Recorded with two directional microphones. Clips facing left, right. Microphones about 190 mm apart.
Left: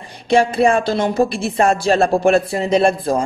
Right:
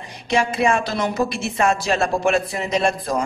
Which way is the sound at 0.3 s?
35° left (ahead or behind).